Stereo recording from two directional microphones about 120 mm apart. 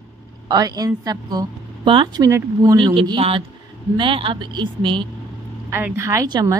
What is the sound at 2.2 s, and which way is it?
Speech, 25° right (ahead or behind).